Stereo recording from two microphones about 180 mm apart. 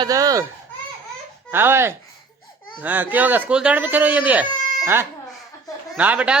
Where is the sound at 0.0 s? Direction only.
20° right (ahead or behind).